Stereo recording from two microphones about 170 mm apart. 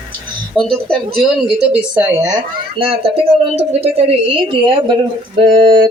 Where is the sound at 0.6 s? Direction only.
5° left (ahead or behind).